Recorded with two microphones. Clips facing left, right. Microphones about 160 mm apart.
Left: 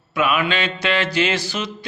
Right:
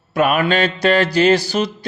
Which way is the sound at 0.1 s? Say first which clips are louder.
Right 4 dB; 45° right (ahead or behind).